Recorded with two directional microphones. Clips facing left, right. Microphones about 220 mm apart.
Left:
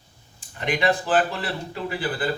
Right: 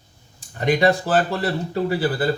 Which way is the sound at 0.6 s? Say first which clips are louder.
Right 5 dB; 40° right (ahead or behind).